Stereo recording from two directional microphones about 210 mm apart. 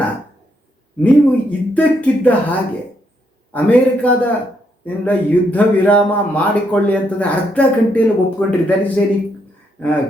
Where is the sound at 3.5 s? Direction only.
5° left (ahead or behind).